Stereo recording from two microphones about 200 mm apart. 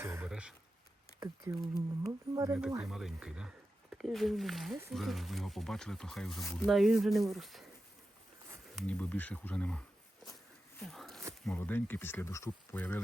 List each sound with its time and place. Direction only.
0.0 s speech: 10° right (ahead or behind)
1.2 s speech: 20° right (ahead or behind)
2.8 s speech: centre (ahead or behind)
8.7 s speech: 5° left (ahead or behind)
10.8 s a sound: centre (ahead or behind)
11.4 s speech: 10° left (ahead or behind)